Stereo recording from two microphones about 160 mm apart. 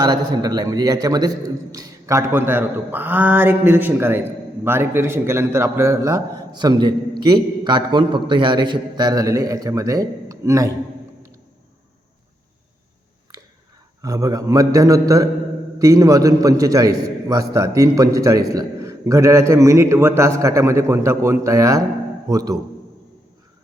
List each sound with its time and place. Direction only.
0.0 s a man's voice: 25° right (ahead or behind)
14.0 s a man's voice: 20° right (ahead or behind)